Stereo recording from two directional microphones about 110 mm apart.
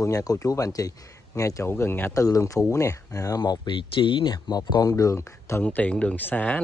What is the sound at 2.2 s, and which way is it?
Speech, 30° left (ahead or behind).